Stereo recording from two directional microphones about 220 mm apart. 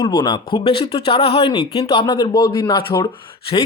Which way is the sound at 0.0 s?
20° left (ahead or behind).